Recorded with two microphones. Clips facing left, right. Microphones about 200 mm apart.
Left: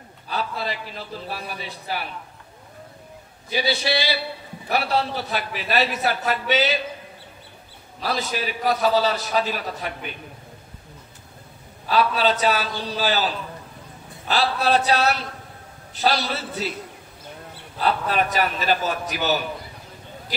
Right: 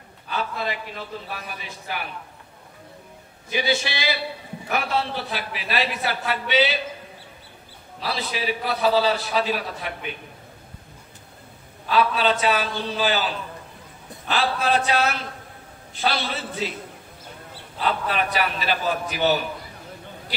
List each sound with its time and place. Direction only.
0.3 s a man's voice: 35° left (ahead or behind)
3.4 s a man's voice: 35° left (ahead or behind)
8.0 s a man's voice: 45° left (ahead or behind)
11.9 s a man's voice: 40° left (ahead or behind)
17.8 s a man's voice: 40° left (ahead or behind)